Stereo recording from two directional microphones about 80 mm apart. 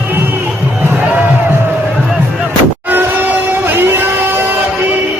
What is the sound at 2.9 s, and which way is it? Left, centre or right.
Music, right.